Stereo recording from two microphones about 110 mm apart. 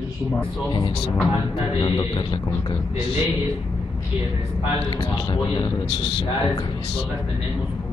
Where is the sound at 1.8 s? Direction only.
45° left (ahead or behind).